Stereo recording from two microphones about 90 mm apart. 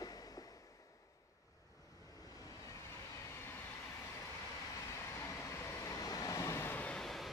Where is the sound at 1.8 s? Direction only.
40° left (ahead or behind); by 7.0 s 20° left (ahead or behind).